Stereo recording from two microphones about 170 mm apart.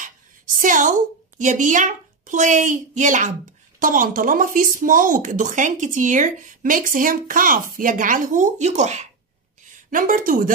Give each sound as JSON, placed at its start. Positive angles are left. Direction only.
{"t": 0.6, "sound": "speech", "side_deg": -50}